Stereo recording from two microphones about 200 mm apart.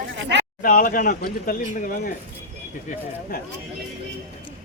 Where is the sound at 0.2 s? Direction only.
60° right (ahead or behind).